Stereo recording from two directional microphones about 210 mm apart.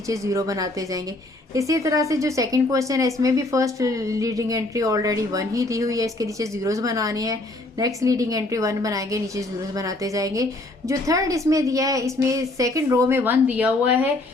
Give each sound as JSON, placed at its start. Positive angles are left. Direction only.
{"t": 0.1, "sound": "a woman's voice", "side_deg": -15}